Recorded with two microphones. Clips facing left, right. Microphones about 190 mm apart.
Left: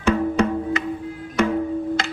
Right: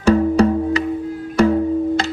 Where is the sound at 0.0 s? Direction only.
35° right (ahead or behind).